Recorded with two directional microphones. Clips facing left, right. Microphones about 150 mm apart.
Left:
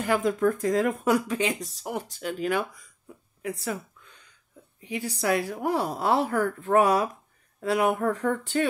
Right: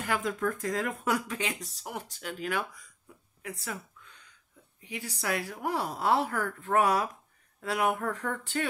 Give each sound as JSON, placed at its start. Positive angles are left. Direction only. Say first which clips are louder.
{"t": 0.0, "sound": "a woman's voice", "louder": "left 7 dB", "side_deg": 25}
{"t": 4.8, "sound": "a woman's voice", "louder": "left 7 dB", "side_deg": 25}